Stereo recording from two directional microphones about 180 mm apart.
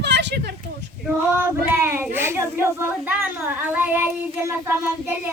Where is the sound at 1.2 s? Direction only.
10° right (ahead or behind).